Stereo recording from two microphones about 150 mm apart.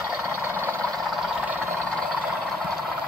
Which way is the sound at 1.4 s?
15° right (ahead or behind).